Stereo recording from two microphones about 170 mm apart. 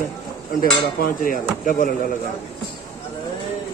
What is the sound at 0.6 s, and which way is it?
Dishes, 60° left (ahead or behind).